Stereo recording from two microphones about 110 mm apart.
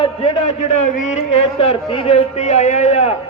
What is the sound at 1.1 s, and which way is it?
Speech, 90° left.